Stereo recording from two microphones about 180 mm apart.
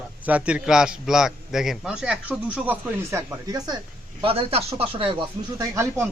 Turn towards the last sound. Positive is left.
turn(degrees=-15)  # may be behind; listen again after turning